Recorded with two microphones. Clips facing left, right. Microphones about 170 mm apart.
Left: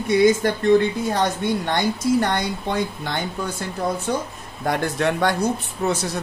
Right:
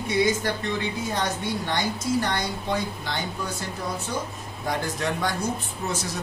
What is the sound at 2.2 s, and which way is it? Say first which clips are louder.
Speech: left 5 dB; 55° left (ahead or behind).